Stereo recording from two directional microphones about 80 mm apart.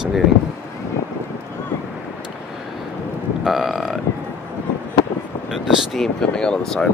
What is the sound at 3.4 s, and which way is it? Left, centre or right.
Burping, centre.